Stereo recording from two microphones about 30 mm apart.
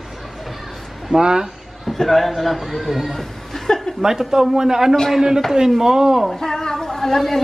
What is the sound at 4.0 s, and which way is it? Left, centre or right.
Speech, centre.